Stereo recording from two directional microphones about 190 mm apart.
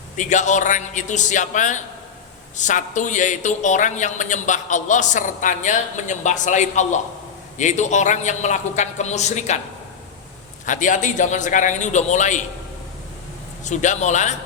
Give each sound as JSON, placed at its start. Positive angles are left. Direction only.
{"t": 0.2, "sound": "a man's voice", "side_deg": 40}
{"t": 10.7, "sound": "a man's voice", "side_deg": 40}
{"t": 13.7, "sound": "a man's voice", "side_deg": 40}